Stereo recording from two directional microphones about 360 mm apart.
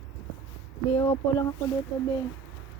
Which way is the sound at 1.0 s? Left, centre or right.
Centre.